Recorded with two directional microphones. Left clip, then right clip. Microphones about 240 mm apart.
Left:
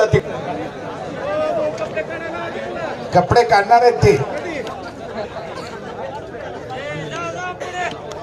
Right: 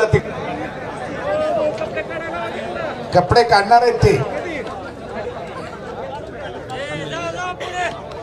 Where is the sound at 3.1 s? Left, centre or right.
Centre.